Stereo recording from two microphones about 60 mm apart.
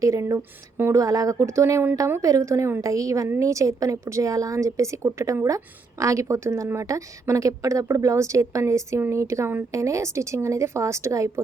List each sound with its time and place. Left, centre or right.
0.0 s a woman's voice: right
0.9 s a woman's voice: right
2.8 s a woman's voice: right